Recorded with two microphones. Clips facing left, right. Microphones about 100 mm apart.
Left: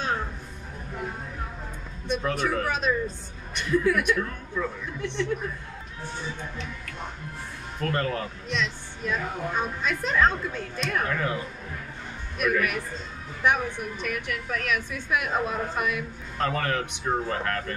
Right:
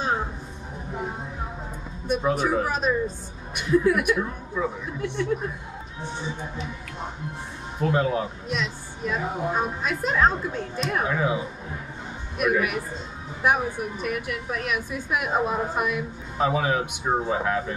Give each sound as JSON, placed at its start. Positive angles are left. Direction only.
{"t": 2.0, "sound": "speech", "side_deg": -10}